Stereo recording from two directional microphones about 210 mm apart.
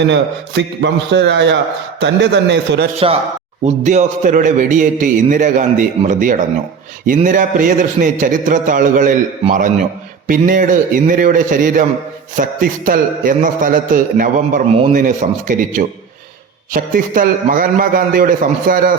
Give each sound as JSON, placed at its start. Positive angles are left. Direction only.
{"t": 0.0, "sound": "a man's voice", "side_deg": -55}
{"t": 3.8, "sound": "a man's voice", "side_deg": -35}